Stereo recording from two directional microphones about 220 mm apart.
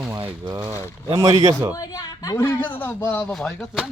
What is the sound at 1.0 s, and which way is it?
Speech, 20° right (ahead or behind).